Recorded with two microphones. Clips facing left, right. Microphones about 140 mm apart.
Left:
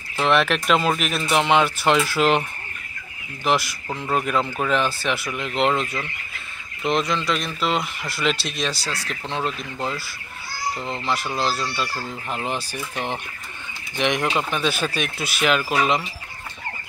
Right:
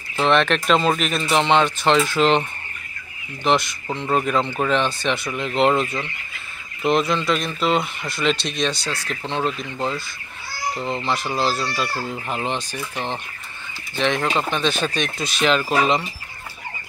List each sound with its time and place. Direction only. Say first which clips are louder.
0.2 s speech: right 2 dB; 5° left (ahead or behind)
3.4 s speech: right 2 dB; 5° left (ahead or behind)
12.4 s speech: right 1 dB; 5° left (ahead or behind)